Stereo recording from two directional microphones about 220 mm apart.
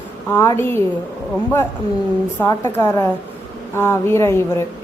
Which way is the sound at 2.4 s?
10° left (ahead or behind).